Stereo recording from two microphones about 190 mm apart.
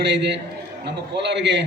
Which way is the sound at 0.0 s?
65° right (ahead or behind).